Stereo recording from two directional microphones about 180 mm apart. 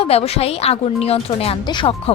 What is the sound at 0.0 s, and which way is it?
A woman's voice, 35° left (ahead or behind).